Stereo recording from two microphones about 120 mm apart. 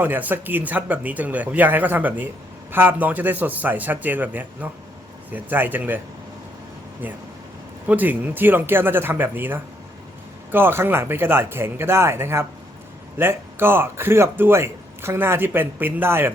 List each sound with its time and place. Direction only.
0.0 s speech: 15° right (ahead or behind)
7.0 s speech: 15° right (ahead or behind)